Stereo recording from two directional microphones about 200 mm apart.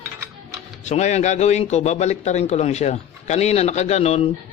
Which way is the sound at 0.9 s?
35° left (ahead or behind).